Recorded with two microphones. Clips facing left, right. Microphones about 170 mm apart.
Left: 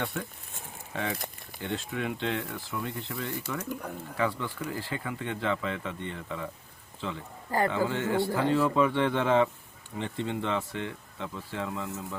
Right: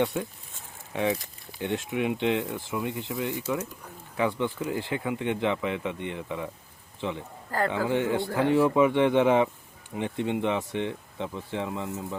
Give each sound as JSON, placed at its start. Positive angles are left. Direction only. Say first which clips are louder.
{"t": 0.0, "sound": "speech", "louder": "right 7 dB", "side_deg": -20}
{"t": 3.6, "sound": "speech", "louder": "left 3 dB", "side_deg": 65}
{"t": 4.2, "sound": "speech", "louder": "right 4 dB", "side_deg": -20}